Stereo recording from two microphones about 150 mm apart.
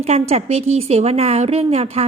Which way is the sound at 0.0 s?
45° right (ahead or behind).